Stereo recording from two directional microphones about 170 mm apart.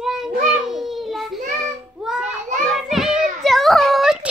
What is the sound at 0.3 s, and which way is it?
Child singing, 50° right (ahead or behind).